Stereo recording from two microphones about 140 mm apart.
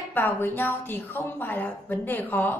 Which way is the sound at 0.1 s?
15° left (ahead or behind).